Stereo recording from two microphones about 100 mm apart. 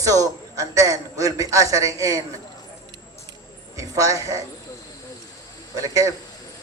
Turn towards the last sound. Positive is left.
turn(degrees=-35)  # may be behind; listen again after turning